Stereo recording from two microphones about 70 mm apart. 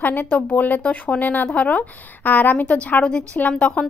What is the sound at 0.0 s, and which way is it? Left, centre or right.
A woman's voice, left.